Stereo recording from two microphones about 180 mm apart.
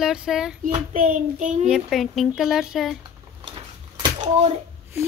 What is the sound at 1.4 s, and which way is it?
Child singing, 45° right (ahead or behind).